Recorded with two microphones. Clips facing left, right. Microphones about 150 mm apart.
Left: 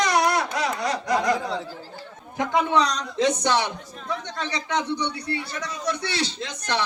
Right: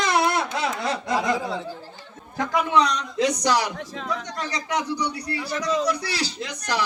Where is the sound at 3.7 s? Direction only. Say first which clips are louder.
Right 6 dB; 90° right.